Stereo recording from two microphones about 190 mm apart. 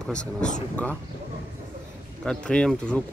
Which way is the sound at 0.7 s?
10° left (ahead or behind).